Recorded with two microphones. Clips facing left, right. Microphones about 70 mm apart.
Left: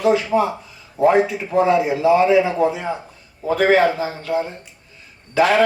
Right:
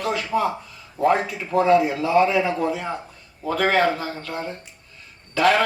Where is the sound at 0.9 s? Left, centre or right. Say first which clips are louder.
Left 5 dB; centre.